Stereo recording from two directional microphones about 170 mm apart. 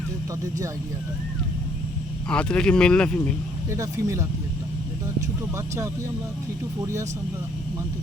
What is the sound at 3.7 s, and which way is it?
Speech, 15° right (ahead or behind).